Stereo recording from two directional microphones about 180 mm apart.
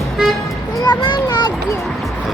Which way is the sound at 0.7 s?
20° left (ahead or behind).